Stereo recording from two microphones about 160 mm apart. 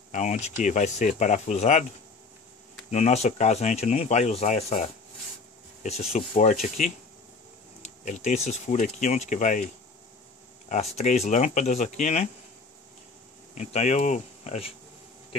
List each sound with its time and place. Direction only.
0.1 s speech: 50° left (ahead or behind)
2.9 s speech: 45° left (ahead or behind)
7.8 s speech: 50° left (ahead or behind)
10.7 s speech: 45° left (ahead or behind)
13.6 s speech: 45° left (ahead or behind)